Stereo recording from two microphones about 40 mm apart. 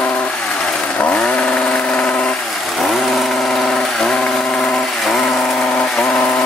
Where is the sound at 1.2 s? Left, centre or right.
Left.